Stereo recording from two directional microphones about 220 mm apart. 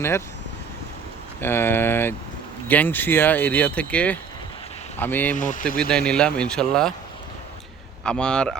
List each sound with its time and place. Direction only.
1.4 s speech: 10° left (ahead or behind)
5.4 s speech: 35° left (ahead or behind)
5.6 s speech: 5° left (ahead or behind)
8.0 s speech: 5° left (ahead or behind)